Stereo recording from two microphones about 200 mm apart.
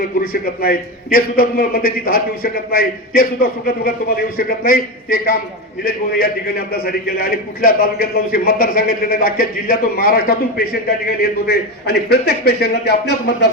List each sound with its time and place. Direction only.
0.2 s a man's voice: 45° left (ahead or behind)